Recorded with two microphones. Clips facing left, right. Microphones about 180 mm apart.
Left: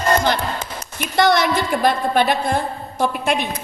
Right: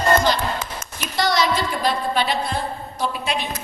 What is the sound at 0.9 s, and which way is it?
A woman's voice, 55° left (ahead or behind).